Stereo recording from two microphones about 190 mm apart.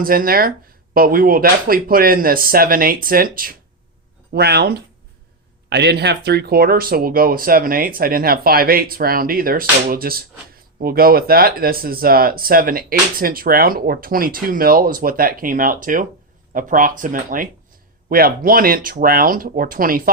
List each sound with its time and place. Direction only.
0.0 s speech: 50° right (ahead or behind)